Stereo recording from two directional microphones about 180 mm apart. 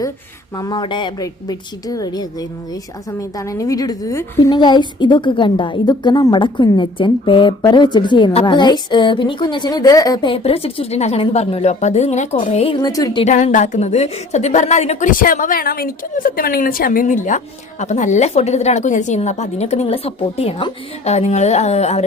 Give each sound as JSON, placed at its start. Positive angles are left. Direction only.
{"t": 0.5, "sound": "a woman's voice", "side_deg": 25}
{"t": 12.8, "sound": "a woman's voice", "side_deg": 20}
{"t": 13.2, "sound": "a woman's voice", "side_deg": 45}